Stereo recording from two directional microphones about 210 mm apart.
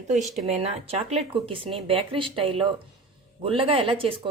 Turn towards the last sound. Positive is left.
turn(degrees=-25)  # may be behind; listen again after turning